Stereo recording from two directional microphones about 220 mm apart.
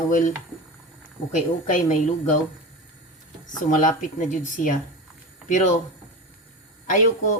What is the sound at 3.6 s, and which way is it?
A woman's voice, 35° left (ahead or behind).